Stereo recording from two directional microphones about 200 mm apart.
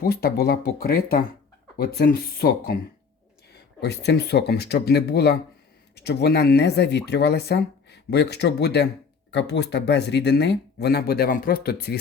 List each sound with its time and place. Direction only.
0.0 s speech: 50° left (ahead or behind)